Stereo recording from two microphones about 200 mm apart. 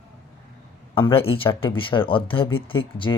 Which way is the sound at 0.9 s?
25° left (ahead or behind).